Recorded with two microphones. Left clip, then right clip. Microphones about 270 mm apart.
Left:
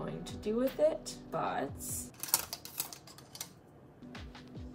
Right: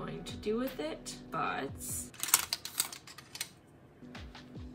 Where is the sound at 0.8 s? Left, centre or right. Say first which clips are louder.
Left 9 dB; right.